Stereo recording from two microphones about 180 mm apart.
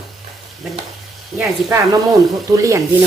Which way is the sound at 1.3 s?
5° right (ahead or behind).